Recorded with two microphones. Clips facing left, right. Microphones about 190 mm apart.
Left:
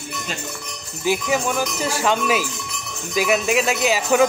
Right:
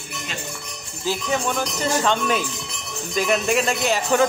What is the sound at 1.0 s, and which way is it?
Speech, 15° left (ahead or behind).